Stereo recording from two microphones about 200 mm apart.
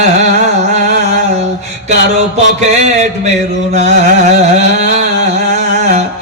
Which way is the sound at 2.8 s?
35° right (ahead or behind).